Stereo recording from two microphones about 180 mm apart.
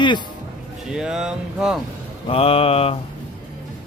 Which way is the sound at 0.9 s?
5° right (ahead or behind).